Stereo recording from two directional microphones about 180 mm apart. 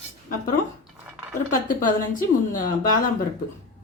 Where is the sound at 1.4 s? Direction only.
50° left (ahead or behind).